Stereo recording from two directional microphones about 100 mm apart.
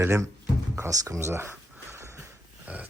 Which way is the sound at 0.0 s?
30° right (ahead or behind).